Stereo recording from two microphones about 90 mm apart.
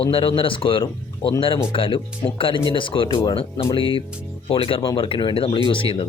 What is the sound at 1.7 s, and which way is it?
Speech, 90° left.